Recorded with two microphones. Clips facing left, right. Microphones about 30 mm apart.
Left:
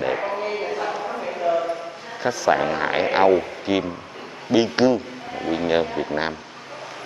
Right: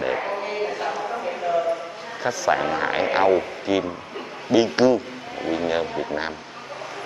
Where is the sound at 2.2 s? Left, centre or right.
Centre.